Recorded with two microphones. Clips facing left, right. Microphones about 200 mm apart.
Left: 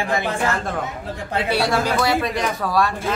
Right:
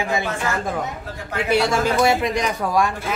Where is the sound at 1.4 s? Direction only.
20° right (ahead or behind).